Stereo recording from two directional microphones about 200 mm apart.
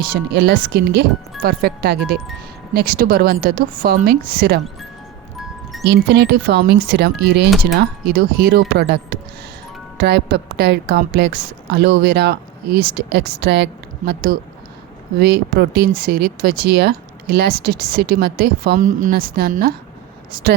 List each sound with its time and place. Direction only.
0.1 s speech: 55° right (ahead or behind)
5.8 s a woman's voice: 55° right (ahead or behind)